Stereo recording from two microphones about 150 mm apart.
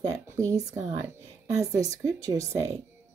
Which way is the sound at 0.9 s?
20° right (ahead or behind).